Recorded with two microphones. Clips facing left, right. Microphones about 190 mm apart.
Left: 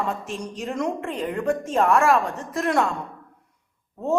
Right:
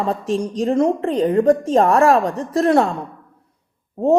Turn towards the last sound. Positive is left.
turn(degrees=-35)  # may be behind; listen again after turning